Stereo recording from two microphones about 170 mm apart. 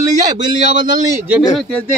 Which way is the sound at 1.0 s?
15° right (ahead or behind).